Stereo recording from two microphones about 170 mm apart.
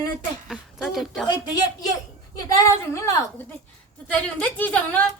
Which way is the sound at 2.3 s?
20° left (ahead or behind).